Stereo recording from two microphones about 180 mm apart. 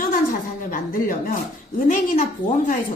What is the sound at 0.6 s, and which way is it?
A woman's voice, 50° left (ahead or behind).